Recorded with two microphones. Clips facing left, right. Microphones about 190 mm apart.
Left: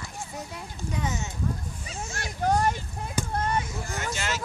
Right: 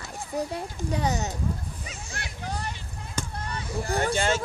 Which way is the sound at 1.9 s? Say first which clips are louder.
Left 3 dB; 45° left (ahead or behind).